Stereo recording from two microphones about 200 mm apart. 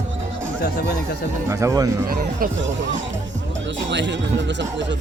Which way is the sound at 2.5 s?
65° right (ahead or behind).